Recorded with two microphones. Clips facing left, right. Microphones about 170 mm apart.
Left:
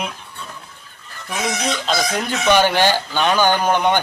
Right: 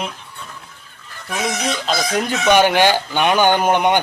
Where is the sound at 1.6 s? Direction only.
Centre (ahead or behind).